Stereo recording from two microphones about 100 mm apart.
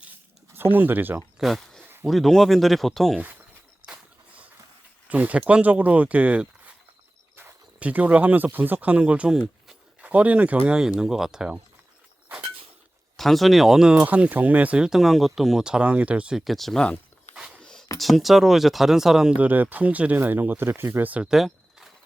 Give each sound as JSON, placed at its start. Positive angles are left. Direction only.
{"t": 0.5, "sound": "speech", "side_deg": -20}
{"t": 1.4, "sound": "speech", "side_deg": 0}
{"t": 3.2, "sound": "speech", "side_deg": -20}
{"t": 3.8, "sound": "a sound", "side_deg": -15}
{"t": 5.0, "sound": "speech", "side_deg": -15}
{"t": 7.3, "sound": "a sound", "side_deg": -20}
{"t": 8.5, "sound": "speech", "side_deg": -20}
{"t": 13.1, "sound": "speech", "side_deg": 0}
{"t": 16.4, "sound": "speech", "side_deg": 0}
{"t": 17.6, "sound": "a sound", "side_deg": 10}
{"t": 18.0, "sound": "speech", "side_deg": 0}
{"t": 21.3, "sound": "a sound", "side_deg": 0}